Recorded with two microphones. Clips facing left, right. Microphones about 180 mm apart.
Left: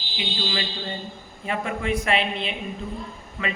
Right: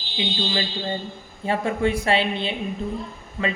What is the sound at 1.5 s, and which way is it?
Speech, 30° right (ahead or behind).